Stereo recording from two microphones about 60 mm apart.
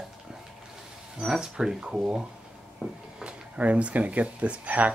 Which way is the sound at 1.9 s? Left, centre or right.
Right.